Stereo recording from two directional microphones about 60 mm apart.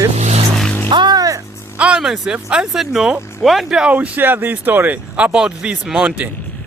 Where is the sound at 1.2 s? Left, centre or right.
Right.